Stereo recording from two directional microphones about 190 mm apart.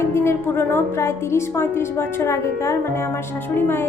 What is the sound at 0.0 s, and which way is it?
Speech, 15° left (ahead or behind).